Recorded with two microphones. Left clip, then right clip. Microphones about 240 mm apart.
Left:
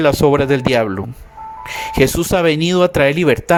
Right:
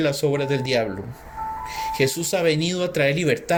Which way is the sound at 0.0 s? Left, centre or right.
Left.